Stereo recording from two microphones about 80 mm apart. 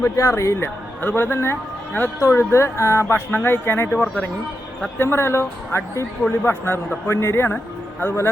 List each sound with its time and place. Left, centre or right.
0.0 s speech: left
2.1 s speech: left; by 4.3 s centre
4.9 s speech: left